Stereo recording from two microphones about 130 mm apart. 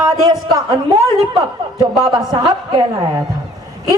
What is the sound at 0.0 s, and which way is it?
A man's voice, 30° right (ahead or behind).